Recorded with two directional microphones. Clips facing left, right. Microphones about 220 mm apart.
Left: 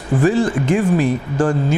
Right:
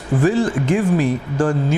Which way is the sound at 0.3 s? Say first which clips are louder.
Left 1 dB; 15° left (ahead or behind).